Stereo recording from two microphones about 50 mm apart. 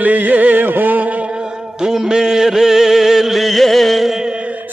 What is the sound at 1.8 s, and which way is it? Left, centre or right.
Music, centre.